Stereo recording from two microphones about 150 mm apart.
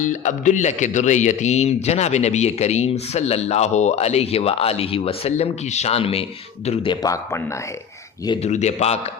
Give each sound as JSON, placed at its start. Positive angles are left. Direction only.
{"t": 0.0, "sound": "a man's voice", "side_deg": 55}
{"t": 8.4, "sound": "a man's voice", "side_deg": 50}